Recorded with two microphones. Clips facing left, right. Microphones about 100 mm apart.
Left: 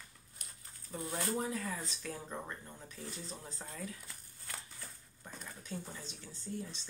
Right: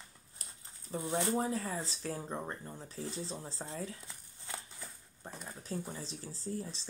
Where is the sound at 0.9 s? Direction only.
25° right (ahead or behind).